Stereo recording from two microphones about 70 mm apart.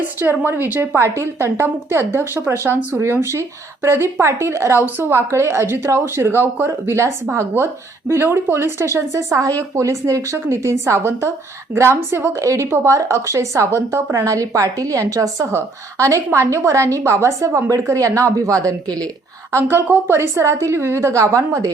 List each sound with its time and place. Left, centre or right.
0.2 s a woman's voice: right
12.3 s a woman's voice: right
19.5 s a woman's voice: right